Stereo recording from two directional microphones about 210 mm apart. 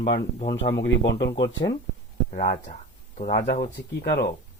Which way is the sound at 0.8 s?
55° left (ahead or behind).